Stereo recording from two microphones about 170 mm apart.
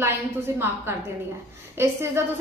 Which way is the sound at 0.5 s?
15° right (ahead or behind).